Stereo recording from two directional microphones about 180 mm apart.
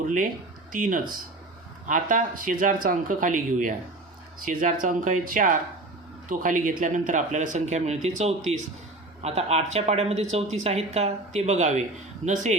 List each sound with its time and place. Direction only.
0.0 s speech: 45° right (ahead or behind)